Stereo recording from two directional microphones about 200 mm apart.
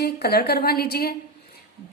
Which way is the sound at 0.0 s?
50° left (ahead or behind).